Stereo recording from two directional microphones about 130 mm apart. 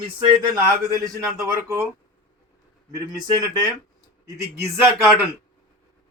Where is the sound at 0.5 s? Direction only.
25° right (ahead or behind).